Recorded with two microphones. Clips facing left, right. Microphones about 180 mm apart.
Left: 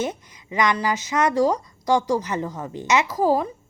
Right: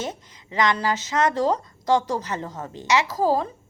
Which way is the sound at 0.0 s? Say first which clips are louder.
Left 4 dB; 15° left (ahead or behind).